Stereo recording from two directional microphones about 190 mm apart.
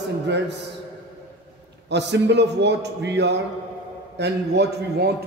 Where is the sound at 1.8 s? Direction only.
65° right (ahead or behind).